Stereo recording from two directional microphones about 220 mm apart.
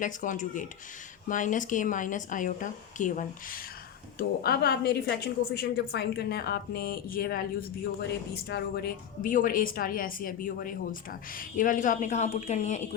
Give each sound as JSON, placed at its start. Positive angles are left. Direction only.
{"t": 0.0, "sound": "a woman's voice", "side_deg": 35}